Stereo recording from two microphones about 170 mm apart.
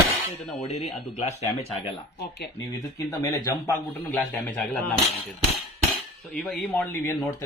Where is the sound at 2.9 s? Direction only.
20° left (ahead or behind).